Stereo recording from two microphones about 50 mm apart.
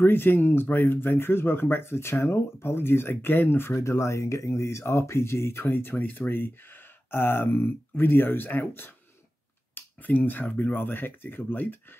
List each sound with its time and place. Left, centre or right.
0.0 s speech: left
3.6 s speech: left